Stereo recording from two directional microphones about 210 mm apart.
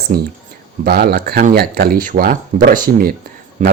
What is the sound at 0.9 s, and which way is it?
Speech, 50° right (ahead or behind).